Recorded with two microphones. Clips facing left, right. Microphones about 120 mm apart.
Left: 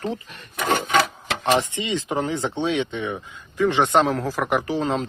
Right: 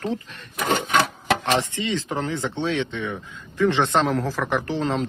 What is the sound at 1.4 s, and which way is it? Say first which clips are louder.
Speech: left 2 dB; 15° left (ahead or behind).